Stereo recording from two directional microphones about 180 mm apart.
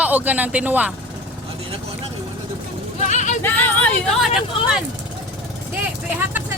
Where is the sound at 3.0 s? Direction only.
40° left (ahead or behind).